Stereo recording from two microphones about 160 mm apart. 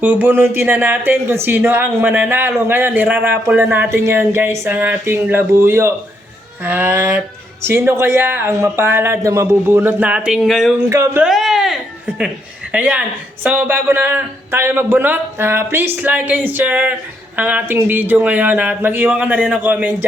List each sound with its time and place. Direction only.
0.0 s speech: 10° right (ahead or behind)
10.8 s speech: 20° right (ahead or behind)
11.2 s speech: centre (ahead or behind)